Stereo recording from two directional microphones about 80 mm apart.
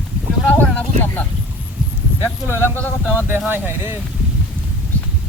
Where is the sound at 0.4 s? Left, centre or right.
Centre.